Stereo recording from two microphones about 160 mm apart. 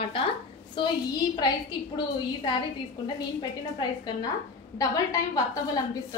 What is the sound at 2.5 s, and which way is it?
A woman's voice, 25° left (ahead or behind).